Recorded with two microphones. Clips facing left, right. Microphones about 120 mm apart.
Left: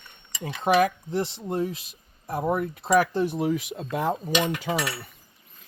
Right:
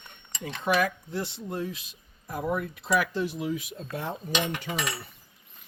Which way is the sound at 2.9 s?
45° left (ahead or behind).